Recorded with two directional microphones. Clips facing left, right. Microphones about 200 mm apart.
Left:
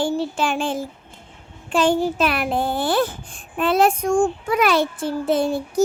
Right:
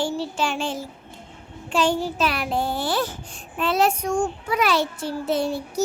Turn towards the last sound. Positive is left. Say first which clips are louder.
# left 4 dB
turn(degrees=50)  # may be behind; listen again after turning